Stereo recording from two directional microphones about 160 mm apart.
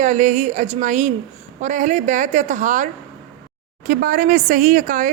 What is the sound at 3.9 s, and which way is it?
A woman's voice, 60° right (ahead or behind).